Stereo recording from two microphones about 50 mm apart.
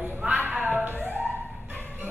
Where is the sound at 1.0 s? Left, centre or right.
Right.